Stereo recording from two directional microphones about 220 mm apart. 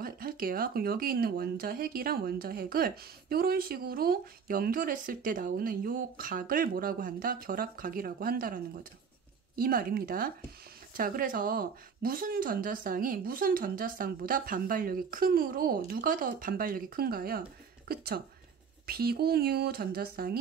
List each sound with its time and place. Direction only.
0.0 s speech: 40° right (ahead or behind)
9.6 s speech: 40° right (ahead or behind)